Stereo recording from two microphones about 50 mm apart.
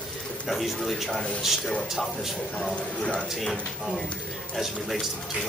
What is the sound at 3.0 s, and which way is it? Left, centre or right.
Speech, left.